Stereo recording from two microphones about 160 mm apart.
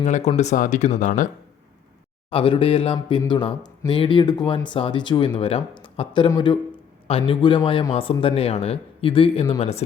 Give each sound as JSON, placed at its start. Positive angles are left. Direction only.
{"t": 0.0, "sound": "speech", "side_deg": 45}
{"t": 2.3, "sound": "speech", "side_deg": 35}